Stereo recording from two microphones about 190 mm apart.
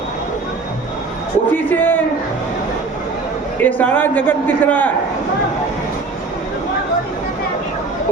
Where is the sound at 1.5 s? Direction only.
10° left (ahead or behind).